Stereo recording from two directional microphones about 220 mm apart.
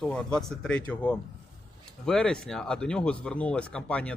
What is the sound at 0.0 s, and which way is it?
Speech, 5° left (ahead or behind).